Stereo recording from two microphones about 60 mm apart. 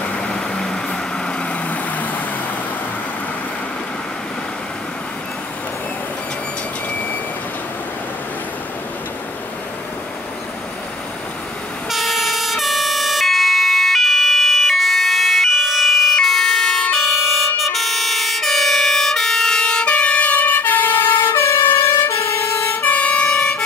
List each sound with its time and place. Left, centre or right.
0.0 s vehicle: centre
11.9 s emergency vehicle: centre
17.7 s fire engine: centre; by 21.6 s left
21.6 s fire engine: left
22.8 s emergency vehicle: left